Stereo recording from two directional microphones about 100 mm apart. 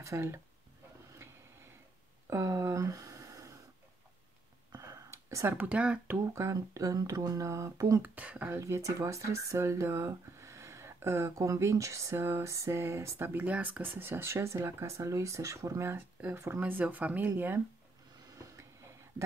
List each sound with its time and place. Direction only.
0.0 s speech: 30° right (ahead or behind)
2.2 s a sound: 30° right (ahead or behind)
4.7 s a sound: 30° right (ahead or behind)
5.6 s speech: 15° right (ahead or behind)
6.3 s speech: 30° right (ahead or behind)
8.0 s speech: 15° right (ahead or behind)